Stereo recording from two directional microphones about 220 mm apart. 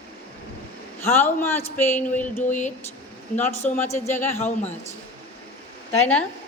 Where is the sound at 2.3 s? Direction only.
35° left (ahead or behind).